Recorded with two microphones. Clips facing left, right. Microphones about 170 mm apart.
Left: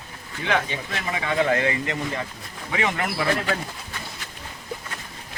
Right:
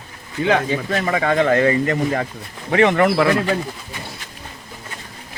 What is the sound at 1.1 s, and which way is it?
Speech, 55° right (ahead or behind).